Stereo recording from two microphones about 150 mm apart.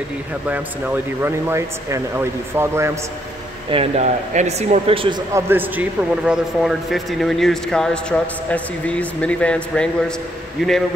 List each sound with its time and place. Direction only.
0.5 s speech: 15° right (ahead or behind)
3.7 s speech: 45° right (ahead or behind)
5.3 s a man's voice: 15° right (ahead or behind)